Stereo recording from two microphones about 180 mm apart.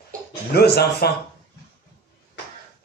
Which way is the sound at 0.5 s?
65° left (ahead or behind).